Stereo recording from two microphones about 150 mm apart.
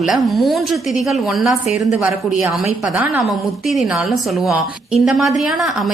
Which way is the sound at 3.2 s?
Centre (ahead or behind).